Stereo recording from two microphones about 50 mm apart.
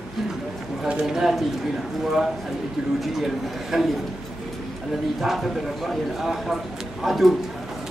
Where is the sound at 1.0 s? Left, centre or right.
Centre.